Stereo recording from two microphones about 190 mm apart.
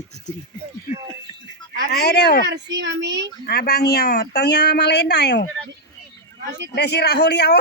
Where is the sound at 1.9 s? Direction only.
60° left (ahead or behind).